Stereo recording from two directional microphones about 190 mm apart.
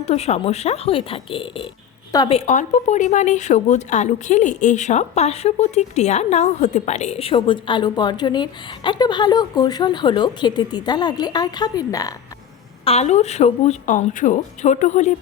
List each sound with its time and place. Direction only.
0.0 s a woman's voice: 35° left (ahead or behind)
2.5 s speech: 40° left (ahead or behind); by 12.1 s 20° left (ahead or behind)
12.8 s a woman's voice: 35° left (ahead or behind)